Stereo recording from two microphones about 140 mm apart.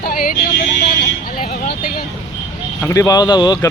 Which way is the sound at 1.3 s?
85° left.